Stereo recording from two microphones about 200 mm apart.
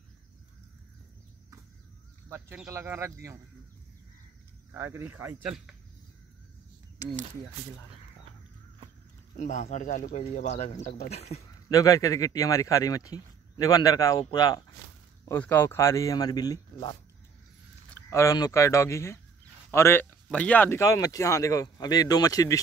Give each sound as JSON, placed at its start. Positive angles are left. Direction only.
{"t": 2.2, "sound": "speech", "side_deg": -10}
{"t": 4.7, "sound": "speech", "side_deg": -10}
{"t": 9.4, "sound": "speech", "side_deg": 35}
{"t": 11.7, "sound": "speech", "side_deg": 15}
{"t": 15.2, "sound": "speech", "side_deg": 10}
{"t": 18.1, "sound": "speech", "side_deg": 15}